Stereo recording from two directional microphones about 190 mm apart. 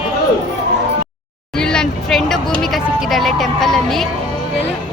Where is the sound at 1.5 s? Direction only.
5° left (ahead or behind).